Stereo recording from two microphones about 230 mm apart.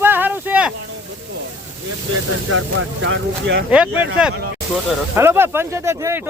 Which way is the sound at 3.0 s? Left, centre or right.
Right.